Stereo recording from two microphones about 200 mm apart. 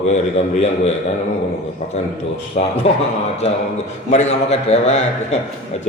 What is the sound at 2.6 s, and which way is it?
Speech, 40° left (ahead or behind).